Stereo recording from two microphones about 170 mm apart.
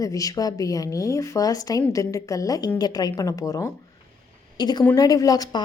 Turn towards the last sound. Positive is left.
turn(degrees=20)  # may be behind; listen again after turning